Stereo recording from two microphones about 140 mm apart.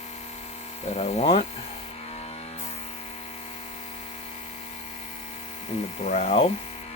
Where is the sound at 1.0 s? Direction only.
50° left (ahead or behind).